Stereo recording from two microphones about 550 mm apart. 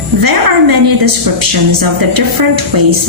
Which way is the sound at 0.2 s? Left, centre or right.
Right.